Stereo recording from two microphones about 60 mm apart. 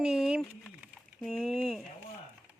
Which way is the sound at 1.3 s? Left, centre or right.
Centre.